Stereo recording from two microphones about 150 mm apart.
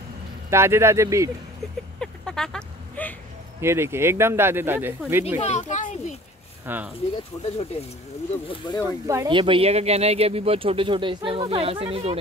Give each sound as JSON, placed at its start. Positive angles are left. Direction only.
{"t": 0.5, "sound": "speech", "side_deg": -15}
{"t": 2.0, "sound": "a sound", "side_deg": 5}
{"t": 3.6, "sound": "speech", "side_deg": -15}
{"t": 5.4, "sound": "speech", "side_deg": 50}
{"t": 6.6, "sound": "speech", "side_deg": -10}
{"t": 7.4, "sound": "speech", "side_deg": 45}
{"t": 8.5, "sound": "speech", "side_deg": 30}
{"t": 9.0, "sound": "speech", "side_deg": -20}
{"t": 9.3, "sound": "speech", "side_deg": -35}